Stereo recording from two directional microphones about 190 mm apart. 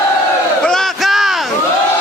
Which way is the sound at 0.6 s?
5° left (ahead or behind).